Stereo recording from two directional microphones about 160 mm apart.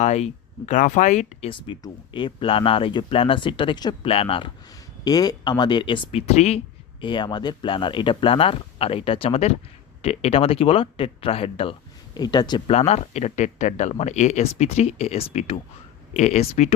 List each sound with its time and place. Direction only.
0.0 s speech: 45° left (ahead or behind)
5.0 s speech: 25° left (ahead or behind); by 6.6 s 45° left (ahead or behind)
7.0 s speech: 30° left (ahead or behind)
12.7 s speech: 40° left (ahead or behind)